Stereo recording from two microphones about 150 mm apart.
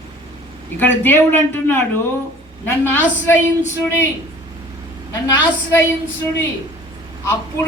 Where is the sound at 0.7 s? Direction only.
15° left (ahead or behind).